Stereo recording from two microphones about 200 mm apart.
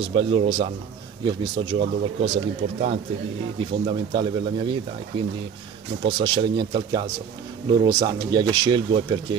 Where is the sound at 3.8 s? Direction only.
25° right (ahead or behind).